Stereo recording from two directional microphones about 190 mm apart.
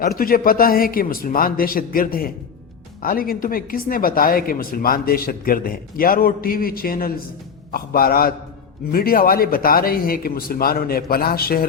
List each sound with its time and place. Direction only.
0.2 s speech: 50° left (ahead or behind)